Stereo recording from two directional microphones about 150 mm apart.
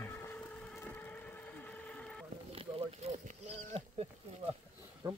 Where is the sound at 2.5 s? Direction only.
40° right (ahead or behind).